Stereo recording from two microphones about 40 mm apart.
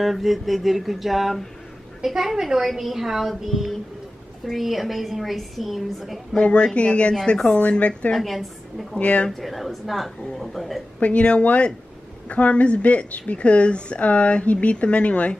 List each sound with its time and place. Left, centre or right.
0.0 s a woman's voice: centre
6.3 s speech: left
8.2 s a woman's voice: centre
9.0 s speech: left
9.4 s a woman's voice: centre
11.0 s speech: left